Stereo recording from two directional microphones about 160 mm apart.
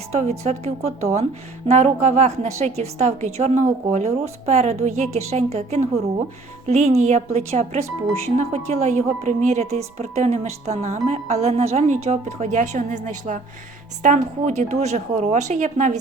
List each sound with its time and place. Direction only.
0.1 s a woman's voice: 45° right (ahead or behind)